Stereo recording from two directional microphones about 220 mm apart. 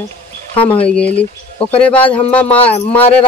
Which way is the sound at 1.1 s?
25° left (ahead or behind).